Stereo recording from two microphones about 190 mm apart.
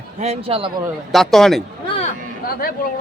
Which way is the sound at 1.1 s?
Centre (ahead or behind).